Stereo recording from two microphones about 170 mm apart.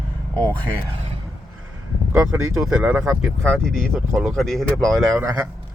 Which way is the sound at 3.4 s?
5° left (ahead or behind).